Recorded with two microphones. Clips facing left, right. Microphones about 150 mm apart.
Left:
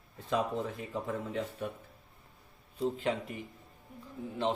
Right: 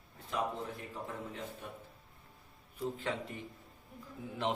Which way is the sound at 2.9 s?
15° left (ahead or behind).